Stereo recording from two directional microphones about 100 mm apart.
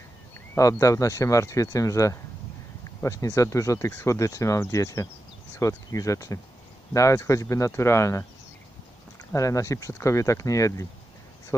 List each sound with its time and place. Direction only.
0.6 s speech: 35° left (ahead or behind)
9.3 s speech: 30° left (ahead or behind)